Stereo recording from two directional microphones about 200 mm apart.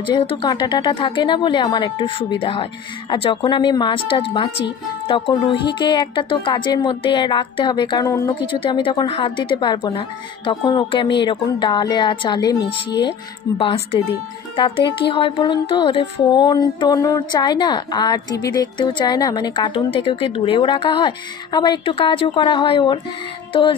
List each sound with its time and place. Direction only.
0.0 s a woman's voice: 25° left (ahead or behind)